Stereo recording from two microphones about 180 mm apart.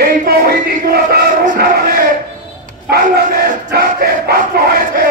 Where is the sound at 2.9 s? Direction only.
60° right (ahead or behind).